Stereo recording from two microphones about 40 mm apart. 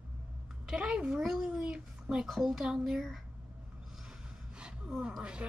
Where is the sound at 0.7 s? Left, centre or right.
Right.